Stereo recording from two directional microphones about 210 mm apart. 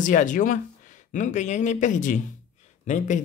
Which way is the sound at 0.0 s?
40° left (ahead or behind).